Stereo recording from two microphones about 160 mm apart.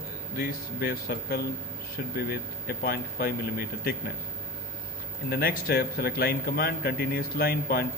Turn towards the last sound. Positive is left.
turn(degrees=70)  # may be behind; listen again after turning